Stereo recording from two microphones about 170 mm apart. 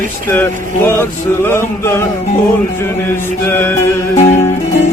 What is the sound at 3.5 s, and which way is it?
Mantra, 10° left (ahead or behind).